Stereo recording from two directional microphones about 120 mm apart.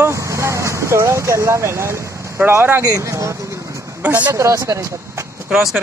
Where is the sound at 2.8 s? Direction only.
30° right (ahead or behind).